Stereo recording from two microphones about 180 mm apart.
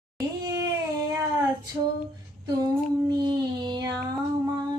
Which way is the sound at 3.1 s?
25° right (ahead or behind).